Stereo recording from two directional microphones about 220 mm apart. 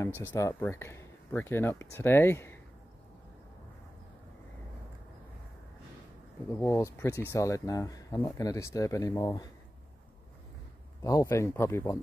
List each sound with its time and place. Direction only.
0.3 s speech: 15° left (ahead or behind)
6.6 s speech: 10° left (ahead or behind)
11.1 s speech: 15° left (ahead or behind)